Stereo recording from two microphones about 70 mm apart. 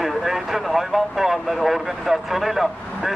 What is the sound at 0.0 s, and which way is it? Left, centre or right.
Vehicle, centre.